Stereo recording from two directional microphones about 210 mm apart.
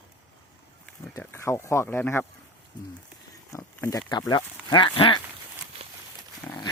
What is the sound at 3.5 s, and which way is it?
Speech, 15° left (ahead or behind).